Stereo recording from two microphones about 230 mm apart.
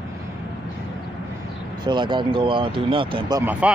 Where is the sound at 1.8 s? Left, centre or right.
Centre.